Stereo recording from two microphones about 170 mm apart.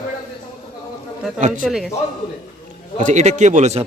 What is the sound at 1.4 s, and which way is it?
Speech, 45° right (ahead or behind).